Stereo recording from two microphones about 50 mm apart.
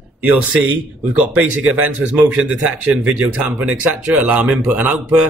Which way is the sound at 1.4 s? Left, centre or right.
Right.